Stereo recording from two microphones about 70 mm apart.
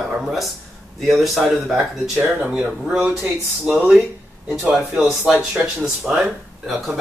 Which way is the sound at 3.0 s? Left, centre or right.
Centre.